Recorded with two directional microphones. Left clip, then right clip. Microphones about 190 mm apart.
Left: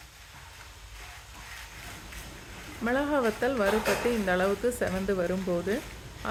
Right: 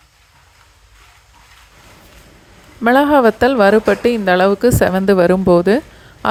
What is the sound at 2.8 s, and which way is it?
A woman's voice, 45° right (ahead or behind).